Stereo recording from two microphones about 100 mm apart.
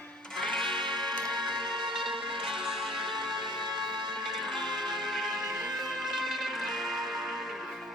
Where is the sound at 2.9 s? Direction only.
55° right (ahead or behind).